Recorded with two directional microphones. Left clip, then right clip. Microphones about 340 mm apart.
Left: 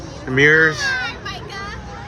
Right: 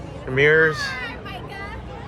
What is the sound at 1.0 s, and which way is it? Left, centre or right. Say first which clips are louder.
Children playing: left 6 dB; centre.